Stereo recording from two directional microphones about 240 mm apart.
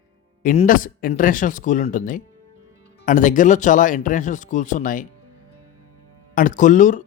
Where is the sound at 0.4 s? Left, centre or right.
Left.